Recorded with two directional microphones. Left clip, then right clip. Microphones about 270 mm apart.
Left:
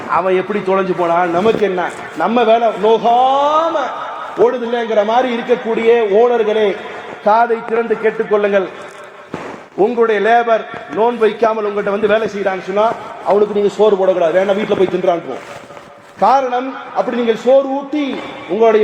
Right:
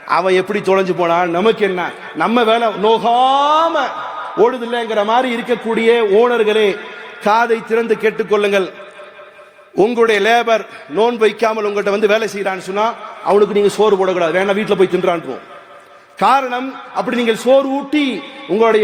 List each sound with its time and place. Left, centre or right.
0.1 s a man's voice: right
9.8 s a man's voice: right
16.2 s a man's voice: right